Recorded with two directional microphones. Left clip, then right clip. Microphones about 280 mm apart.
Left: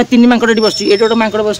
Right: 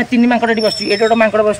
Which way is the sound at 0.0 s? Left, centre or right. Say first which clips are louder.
Left 4 dB; centre.